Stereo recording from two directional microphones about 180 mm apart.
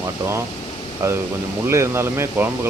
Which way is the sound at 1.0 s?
15° right (ahead or behind).